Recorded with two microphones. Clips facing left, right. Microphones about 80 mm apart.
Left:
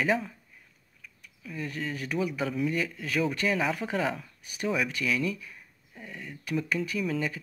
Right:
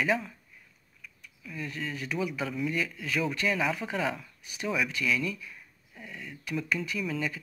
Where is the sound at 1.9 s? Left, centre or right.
Left.